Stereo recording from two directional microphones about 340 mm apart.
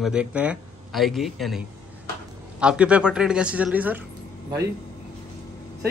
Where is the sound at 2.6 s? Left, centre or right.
Centre.